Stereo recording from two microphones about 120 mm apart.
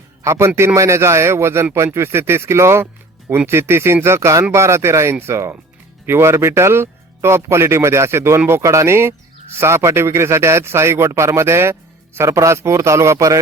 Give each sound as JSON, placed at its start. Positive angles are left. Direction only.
{"t": 0.2, "sound": "a man's voice", "side_deg": -25}